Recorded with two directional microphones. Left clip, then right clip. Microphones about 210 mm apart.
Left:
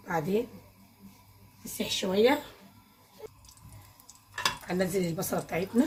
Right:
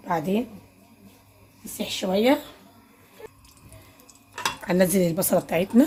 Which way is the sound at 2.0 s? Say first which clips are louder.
Right 3 dB; 30° right (ahead or behind).